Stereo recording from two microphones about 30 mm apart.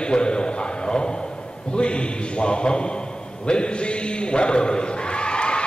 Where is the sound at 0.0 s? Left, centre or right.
Left.